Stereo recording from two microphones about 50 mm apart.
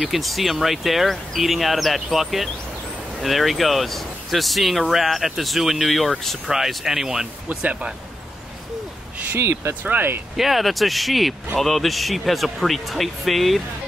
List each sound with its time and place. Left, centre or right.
0.0 s speech: centre
9.4 s speech: right
9.8 s speech: right
10.3 s speech: centre